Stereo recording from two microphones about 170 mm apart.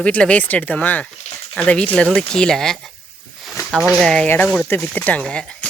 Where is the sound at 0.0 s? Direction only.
5° left (ahead or behind).